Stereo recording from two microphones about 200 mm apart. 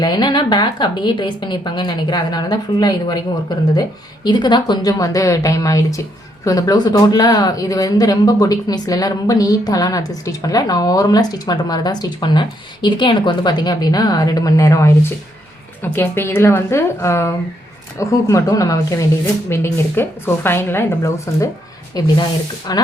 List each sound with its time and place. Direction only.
0.0 s speech: 20° left (ahead or behind)